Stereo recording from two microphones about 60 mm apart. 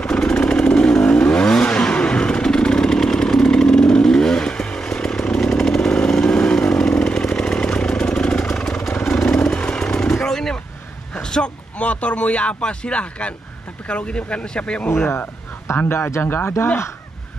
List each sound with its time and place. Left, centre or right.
0.0 s motorcycle: centre
9.3 s vehicle: centre
11.1 s a sound: centre
13.8 s speech: centre
15.8 s speech: left